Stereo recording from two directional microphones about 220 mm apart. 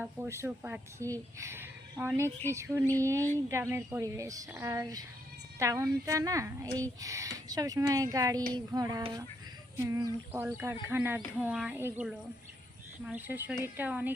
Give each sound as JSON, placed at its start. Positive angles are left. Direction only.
{"t": 0.0, "sound": "a woman's voice", "side_deg": -10}
{"t": 13.1, "sound": "a woman's voice", "side_deg": -10}